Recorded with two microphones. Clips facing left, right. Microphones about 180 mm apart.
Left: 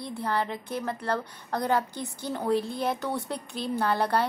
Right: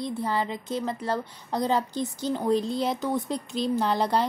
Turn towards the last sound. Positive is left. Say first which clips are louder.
# right 1 dB
turn(degrees=-15)  # may be behind; listen again after turning